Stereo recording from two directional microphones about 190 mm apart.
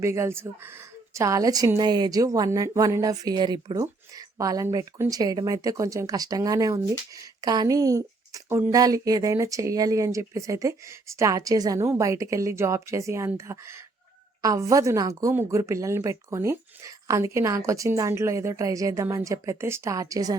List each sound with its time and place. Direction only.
0.0 s a woman's voice: 15° right (ahead or behind)